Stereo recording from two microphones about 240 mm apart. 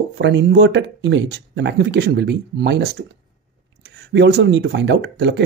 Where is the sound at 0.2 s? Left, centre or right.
Right.